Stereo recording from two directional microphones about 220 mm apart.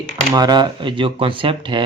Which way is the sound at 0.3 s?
20° right (ahead or behind).